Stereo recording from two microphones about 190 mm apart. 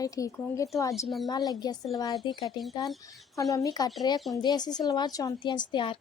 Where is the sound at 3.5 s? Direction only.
20° left (ahead or behind).